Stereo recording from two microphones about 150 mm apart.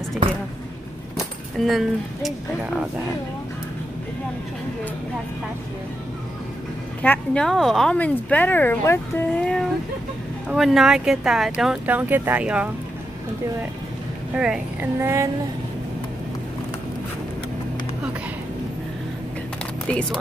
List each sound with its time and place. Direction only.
1.1 s speech: centre (ahead or behind)
7.0 s speech: 10° left (ahead or behind); by 12.6 s 10° right (ahead or behind)
14.3 s speech: 5° right (ahead or behind)
15.0 s a sound: 15° right (ahead or behind)
19.9 s speech: 5° left (ahead or behind)